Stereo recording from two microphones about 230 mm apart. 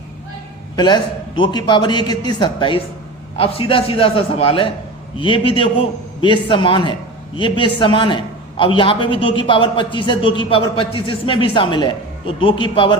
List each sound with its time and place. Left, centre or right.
0.8 s a man's voice: centre